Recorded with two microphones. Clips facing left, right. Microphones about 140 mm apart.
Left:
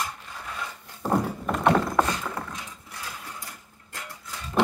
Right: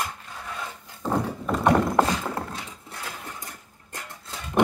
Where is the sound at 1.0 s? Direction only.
10° left (ahead or behind).